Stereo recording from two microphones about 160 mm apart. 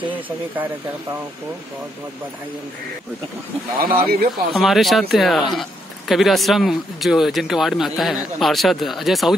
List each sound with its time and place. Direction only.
3.8 s speech: 70° right (ahead or behind)
4.6 s speech: centre (ahead or behind)